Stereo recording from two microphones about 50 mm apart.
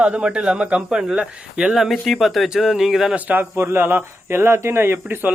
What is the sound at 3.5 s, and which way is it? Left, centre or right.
Speech, right.